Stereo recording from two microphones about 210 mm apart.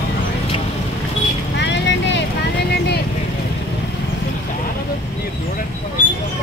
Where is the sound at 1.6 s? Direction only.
55° left (ahead or behind).